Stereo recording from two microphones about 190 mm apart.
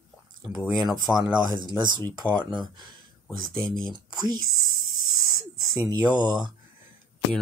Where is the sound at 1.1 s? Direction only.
5° left (ahead or behind).